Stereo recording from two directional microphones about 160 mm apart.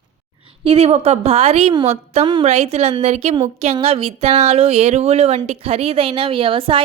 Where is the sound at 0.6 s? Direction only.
40° right (ahead or behind).